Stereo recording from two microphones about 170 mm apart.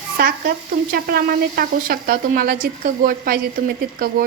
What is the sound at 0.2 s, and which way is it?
Speech, 60° right (ahead or behind).